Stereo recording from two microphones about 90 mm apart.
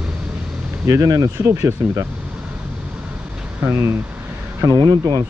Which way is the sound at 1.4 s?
30° right (ahead or behind).